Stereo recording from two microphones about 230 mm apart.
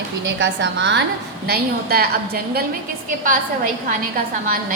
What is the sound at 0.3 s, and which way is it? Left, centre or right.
A woman's voice, right.